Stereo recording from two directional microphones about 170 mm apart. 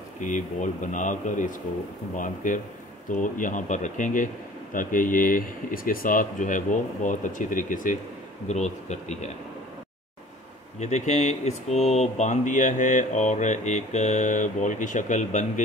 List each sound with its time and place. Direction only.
0.2 s speech: 50° left (ahead or behind)
10.8 s speech: 40° left (ahead or behind)